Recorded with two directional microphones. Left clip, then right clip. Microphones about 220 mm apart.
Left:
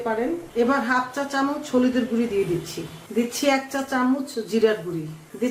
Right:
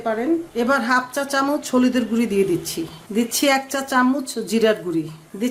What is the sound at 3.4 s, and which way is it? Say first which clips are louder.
Speech: right 4 dB; 45° right (ahead or behind).